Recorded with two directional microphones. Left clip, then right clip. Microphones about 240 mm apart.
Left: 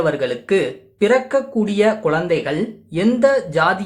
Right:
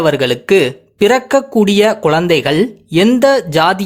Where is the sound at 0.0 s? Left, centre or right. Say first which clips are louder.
Right 6 dB; right.